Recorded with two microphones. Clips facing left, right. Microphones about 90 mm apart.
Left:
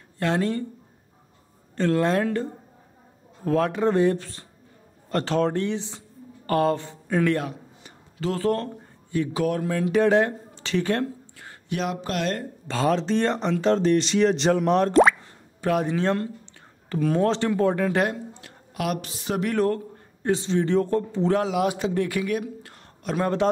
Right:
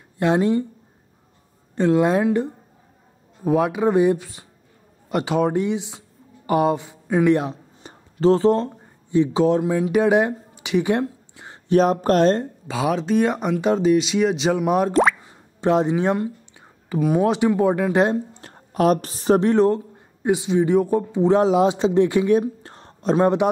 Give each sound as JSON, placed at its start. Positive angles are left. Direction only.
{"t": 0.2, "sound": "speech", "side_deg": -20}
{"t": 1.8, "sound": "speech", "side_deg": -15}
{"t": 7.8, "sound": "speech", "side_deg": -30}
{"t": 11.7, "sound": "speech", "side_deg": -40}
{"t": 12.6, "sound": "speech", "side_deg": -5}
{"t": 15.6, "sound": "speech", "side_deg": -25}
{"t": 18.1, "sound": "a woman's voice", "side_deg": -35}
{"t": 19.5, "sound": "speech", "side_deg": -20}
{"t": 21.4, "sound": "a man's voice", "side_deg": -25}